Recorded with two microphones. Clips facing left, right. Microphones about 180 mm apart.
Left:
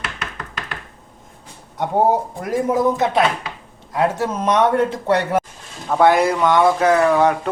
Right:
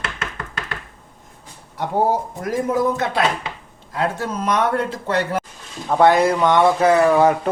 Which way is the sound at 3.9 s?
25° left (ahead or behind).